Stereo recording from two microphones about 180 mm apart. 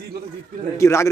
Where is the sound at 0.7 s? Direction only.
15° left (ahead or behind).